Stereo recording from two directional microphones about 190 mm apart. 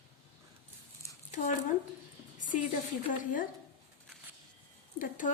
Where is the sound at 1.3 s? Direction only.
40° left (ahead or behind).